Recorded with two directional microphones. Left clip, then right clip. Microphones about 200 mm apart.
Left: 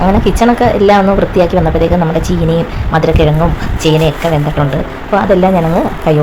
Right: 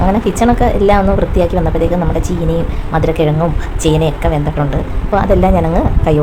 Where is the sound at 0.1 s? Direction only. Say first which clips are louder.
Left 3 dB; 15° left (ahead or behind).